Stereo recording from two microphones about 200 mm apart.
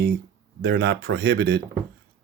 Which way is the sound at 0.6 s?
55° right (ahead or behind).